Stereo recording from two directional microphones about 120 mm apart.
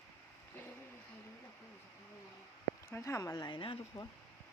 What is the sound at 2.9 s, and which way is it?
Speech, 25° left (ahead or behind).